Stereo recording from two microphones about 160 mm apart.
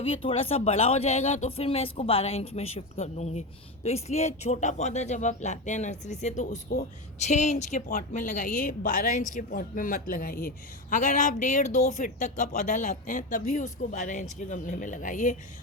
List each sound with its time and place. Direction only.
0.0 s a woman's voice: 35° left (ahead or behind); by 15.4 s 50° left (ahead or behind)